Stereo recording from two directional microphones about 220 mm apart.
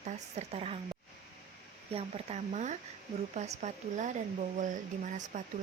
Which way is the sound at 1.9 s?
30° right (ahead or behind).